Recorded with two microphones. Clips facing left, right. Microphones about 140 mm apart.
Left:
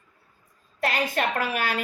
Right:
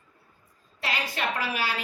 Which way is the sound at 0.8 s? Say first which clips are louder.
Left 5 dB; 50° left (ahead or behind).